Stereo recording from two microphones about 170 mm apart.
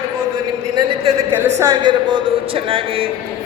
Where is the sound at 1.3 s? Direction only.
20° right (ahead or behind).